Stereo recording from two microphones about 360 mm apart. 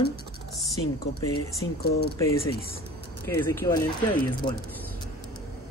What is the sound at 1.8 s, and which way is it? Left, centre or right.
Speech, left.